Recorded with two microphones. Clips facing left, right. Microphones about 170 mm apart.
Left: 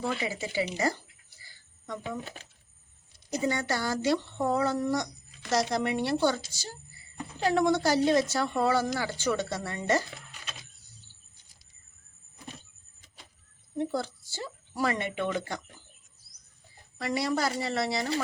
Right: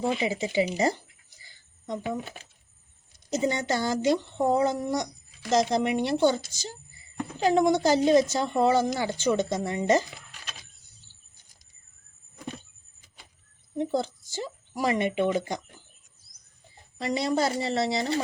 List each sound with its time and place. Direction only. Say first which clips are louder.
0.2 s a woman's voice: right 5 dB; 20° right (ahead or behind)
1.4 s a sound: even; 20° right (ahead or behind)
3.2 s a woman's voice: right 3 dB; 20° right (ahead or behind)
13.7 s a woman's voice: right 3 dB; 20° right (ahead or behind)
17.0 s a woman's voice: right 3 dB; 20° right (ahead or behind)